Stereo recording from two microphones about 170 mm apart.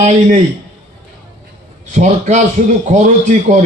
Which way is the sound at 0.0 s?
45° right (ahead or behind).